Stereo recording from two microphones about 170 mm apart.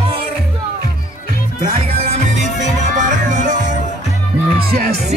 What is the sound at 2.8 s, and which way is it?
Music, 45° right (ahead or behind).